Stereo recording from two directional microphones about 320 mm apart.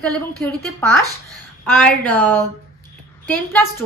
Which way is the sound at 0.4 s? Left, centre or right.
Centre.